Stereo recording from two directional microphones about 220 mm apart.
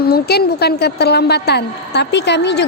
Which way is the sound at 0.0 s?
45° left (ahead or behind).